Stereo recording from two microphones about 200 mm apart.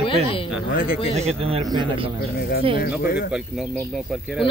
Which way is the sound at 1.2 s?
30° right (ahead or behind).